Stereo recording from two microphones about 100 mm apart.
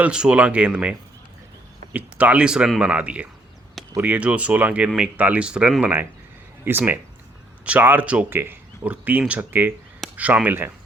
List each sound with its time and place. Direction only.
0.0 s speech: 10° right (ahead or behind)
6.7 s speech: 20° right (ahead or behind)